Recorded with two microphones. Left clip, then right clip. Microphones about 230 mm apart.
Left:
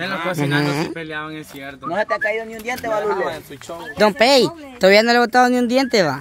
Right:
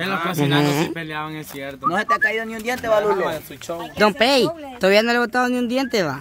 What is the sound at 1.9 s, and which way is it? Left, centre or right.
Speech, right.